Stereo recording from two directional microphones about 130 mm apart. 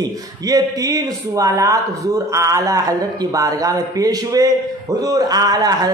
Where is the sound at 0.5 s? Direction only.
30° right (ahead or behind).